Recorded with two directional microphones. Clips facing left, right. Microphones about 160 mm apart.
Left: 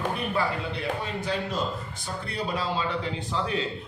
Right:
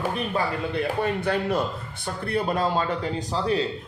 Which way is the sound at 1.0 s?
60° right (ahead or behind).